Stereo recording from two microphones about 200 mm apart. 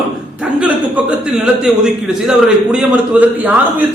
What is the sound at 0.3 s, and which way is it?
A man's voice, 5° right (ahead or behind).